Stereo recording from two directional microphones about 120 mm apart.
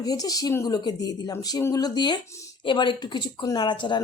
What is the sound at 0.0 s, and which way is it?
Speech, 30° left (ahead or behind).